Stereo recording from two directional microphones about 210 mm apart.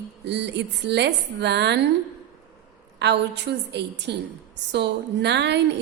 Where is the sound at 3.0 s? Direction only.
55° right (ahead or behind).